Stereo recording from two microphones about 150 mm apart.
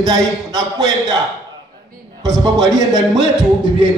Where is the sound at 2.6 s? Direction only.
25° right (ahead or behind).